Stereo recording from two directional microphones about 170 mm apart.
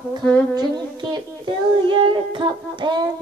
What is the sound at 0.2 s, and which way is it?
Music, 10° left (ahead or behind).